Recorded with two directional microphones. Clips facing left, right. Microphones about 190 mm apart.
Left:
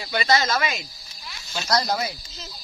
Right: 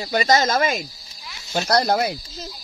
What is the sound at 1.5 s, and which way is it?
Speech, 60° right (ahead or behind).